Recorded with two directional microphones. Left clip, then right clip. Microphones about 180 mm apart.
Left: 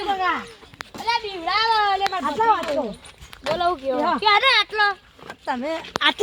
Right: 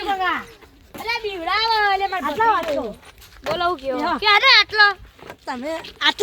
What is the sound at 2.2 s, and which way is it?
Speech, 10° right (ahead or behind).